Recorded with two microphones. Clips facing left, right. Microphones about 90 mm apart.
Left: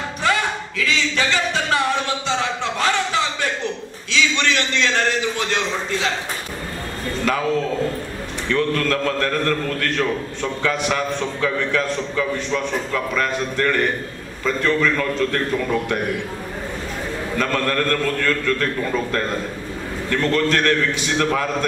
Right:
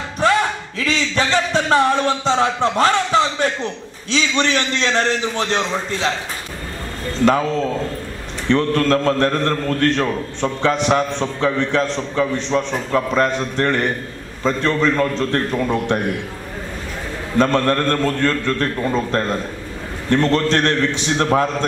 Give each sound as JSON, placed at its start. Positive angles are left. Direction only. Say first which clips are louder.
{"t": 0.7, "sound": "a sound", "louder": "right 2 dB", "side_deg": -40}
{"t": 4.1, "sound": "a man's voice", "louder": "right 2 dB", "side_deg": -35}
{"t": 8.5, "sound": "a man's voice", "louder": "right 4 dB", "side_deg": -30}
{"t": 17.4, "sound": "a man's voice", "louder": "right 6 dB", "side_deg": -30}